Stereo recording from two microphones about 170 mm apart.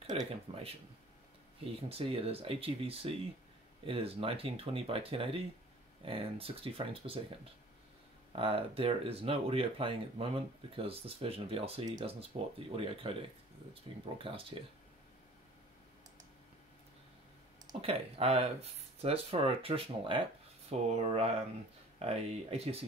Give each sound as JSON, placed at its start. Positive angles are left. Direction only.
{"t": 0.2, "sound": "speech", "side_deg": -35}
{"t": 8.4, "sound": "speech", "side_deg": -35}
{"t": 17.7, "sound": "speech", "side_deg": -35}